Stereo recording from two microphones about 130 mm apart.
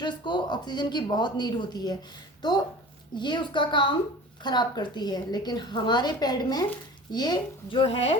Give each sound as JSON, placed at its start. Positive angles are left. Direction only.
{"t": 0.0, "sound": "a woman's voice", "side_deg": 35}